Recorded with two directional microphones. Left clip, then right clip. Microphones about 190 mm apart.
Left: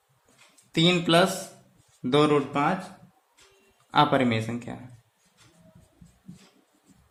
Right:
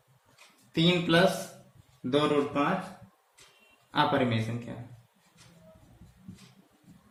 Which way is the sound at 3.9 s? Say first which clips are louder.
Left 5 dB; 55° left (ahead or behind).